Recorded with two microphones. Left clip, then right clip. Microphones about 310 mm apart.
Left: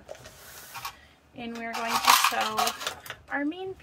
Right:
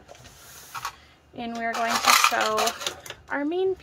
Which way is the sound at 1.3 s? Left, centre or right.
Centre.